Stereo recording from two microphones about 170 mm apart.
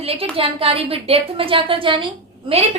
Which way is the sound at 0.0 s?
35° right (ahead or behind).